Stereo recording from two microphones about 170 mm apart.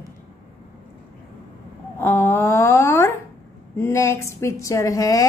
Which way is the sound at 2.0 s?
10° left (ahead or behind).